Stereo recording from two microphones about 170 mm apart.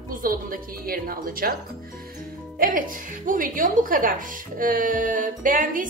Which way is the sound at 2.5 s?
55° right (ahead or behind).